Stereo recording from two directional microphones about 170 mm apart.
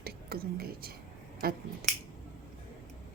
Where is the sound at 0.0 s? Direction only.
65° right (ahead or behind).